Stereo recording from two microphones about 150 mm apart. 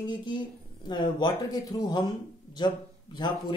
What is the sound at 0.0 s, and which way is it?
Speech, 30° left (ahead or behind).